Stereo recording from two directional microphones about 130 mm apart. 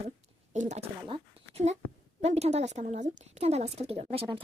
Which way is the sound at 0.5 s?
65° right (ahead or behind).